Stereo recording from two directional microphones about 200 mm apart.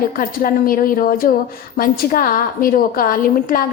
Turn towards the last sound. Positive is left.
turn(degrees=45)  # may be behind; listen again after turning